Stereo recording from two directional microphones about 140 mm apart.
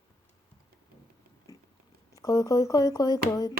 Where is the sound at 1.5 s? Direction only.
25° left (ahead or behind).